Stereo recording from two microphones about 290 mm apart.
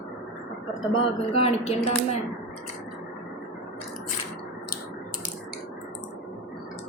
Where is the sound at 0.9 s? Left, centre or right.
Centre.